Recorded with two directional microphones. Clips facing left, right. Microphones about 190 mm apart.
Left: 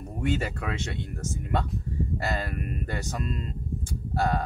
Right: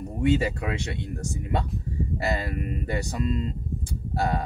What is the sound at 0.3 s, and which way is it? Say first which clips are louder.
Speech: right 5 dB; 15° right (ahead or behind).